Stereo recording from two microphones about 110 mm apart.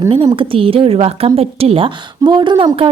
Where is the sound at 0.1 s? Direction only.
50° right (ahead or behind).